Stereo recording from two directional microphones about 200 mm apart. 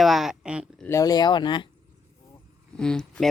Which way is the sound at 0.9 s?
15° left (ahead or behind).